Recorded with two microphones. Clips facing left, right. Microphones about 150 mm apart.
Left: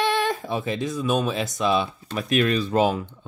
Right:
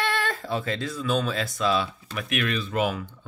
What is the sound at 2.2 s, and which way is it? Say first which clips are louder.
Speech: left 6 dB; 35° left (ahead or behind).